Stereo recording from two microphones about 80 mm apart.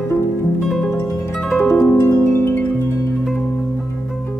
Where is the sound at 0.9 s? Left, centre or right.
Left.